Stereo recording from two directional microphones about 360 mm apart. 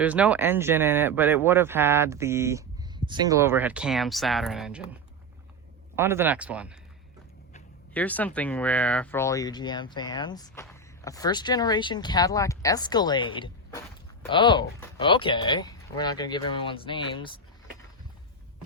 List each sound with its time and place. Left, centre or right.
0.0 s speech: centre
6.0 s speech: centre
7.9 s speech: centre